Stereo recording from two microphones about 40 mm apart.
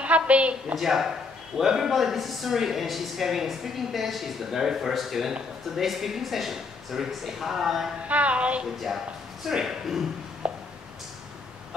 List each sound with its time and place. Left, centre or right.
0.0 s a woman's voice: right
0.7 s speech: centre
8.1 s speech: right
8.7 s speech: centre
10.4 s a sound: right